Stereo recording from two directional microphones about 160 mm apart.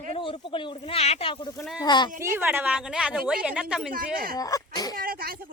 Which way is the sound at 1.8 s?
25° left (ahead or behind).